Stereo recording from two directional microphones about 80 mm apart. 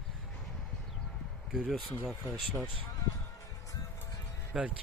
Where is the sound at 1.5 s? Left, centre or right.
Centre.